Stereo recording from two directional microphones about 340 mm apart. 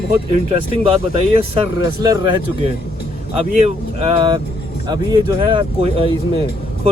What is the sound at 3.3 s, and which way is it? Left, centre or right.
Speech, centre.